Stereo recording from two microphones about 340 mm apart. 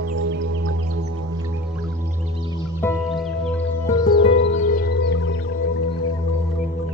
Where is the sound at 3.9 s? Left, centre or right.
Centre; by 5.6 s left.